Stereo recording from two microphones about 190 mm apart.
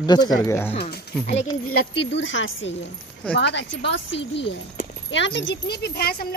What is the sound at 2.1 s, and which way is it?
Speech, 80° left.